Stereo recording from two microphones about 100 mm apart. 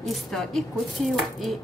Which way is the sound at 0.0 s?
Centre (ahead or behind).